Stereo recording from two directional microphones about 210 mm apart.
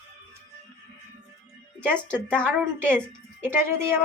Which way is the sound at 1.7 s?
10° right (ahead or behind).